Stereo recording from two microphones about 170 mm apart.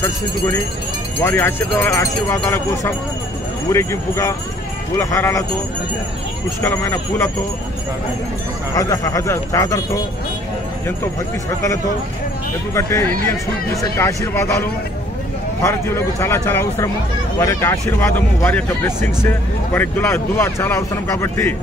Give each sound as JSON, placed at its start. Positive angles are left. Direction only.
{"t": 1.2, "sound": "speech", "side_deg": 10}
{"t": 6.6, "sound": "speech", "side_deg": 10}
{"t": 8.7, "sound": "speech", "side_deg": 20}
{"t": 12.7, "sound": "speech", "side_deg": 15}